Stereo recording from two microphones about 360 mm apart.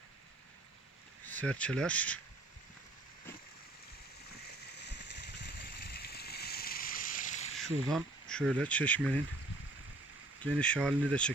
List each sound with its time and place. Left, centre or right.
1.3 s speech: centre
4.9 s a sound: left
7.5 s speech: centre
10.4 s speech: centre